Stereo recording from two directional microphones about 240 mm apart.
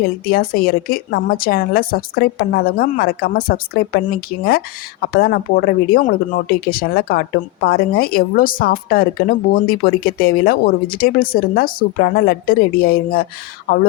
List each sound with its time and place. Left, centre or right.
0.3 s a woman's voice: left